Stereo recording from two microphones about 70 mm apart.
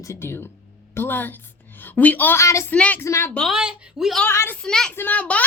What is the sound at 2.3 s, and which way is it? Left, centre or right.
Speech, left.